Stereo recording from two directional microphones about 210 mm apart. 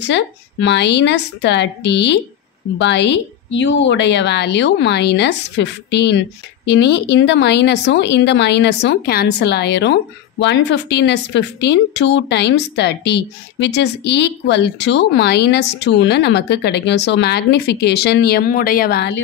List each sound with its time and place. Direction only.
0.0 s a woman's voice: 55° left (ahead or behind)